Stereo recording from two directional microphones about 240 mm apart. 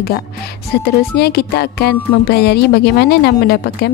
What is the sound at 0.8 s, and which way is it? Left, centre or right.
Music, left.